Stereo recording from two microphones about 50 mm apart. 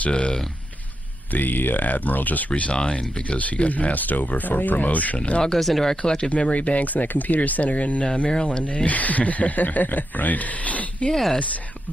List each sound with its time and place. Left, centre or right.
0.1 s speech: centre
1.3 s speech: left
5.4 s speech: centre
6.0 s speech: left
11.1 s speech: centre